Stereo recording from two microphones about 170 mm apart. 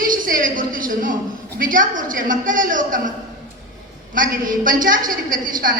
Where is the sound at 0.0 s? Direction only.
55° right (ahead or behind).